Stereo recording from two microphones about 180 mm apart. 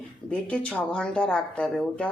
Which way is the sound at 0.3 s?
5° left (ahead or behind).